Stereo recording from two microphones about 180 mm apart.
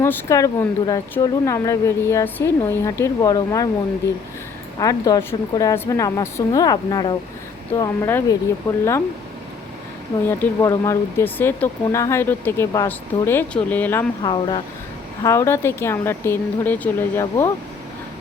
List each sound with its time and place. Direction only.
0.0 s speech: 15° left (ahead or behind)
4.8 s speech: 20° left (ahead or behind)
10.2 s speech: 15° left (ahead or behind)
14.2 s speech: 25° left (ahead or behind)